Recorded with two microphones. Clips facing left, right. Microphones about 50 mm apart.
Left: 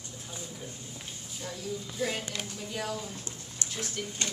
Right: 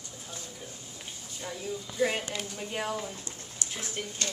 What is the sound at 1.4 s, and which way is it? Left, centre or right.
Speech, centre.